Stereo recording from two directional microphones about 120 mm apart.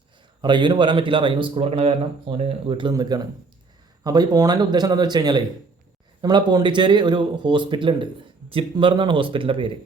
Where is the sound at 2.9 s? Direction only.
35° right (ahead or behind).